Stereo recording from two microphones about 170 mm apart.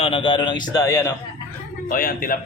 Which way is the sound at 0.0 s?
30° left (ahead or behind).